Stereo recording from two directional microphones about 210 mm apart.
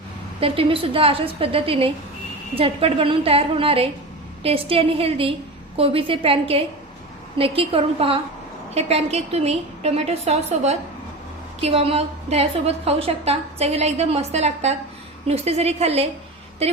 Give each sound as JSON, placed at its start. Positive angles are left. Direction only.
{"t": 0.3, "sound": "a woman's voice", "side_deg": -25}